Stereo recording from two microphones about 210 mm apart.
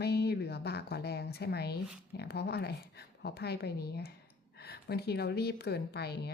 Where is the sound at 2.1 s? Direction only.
50° left (ahead or behind).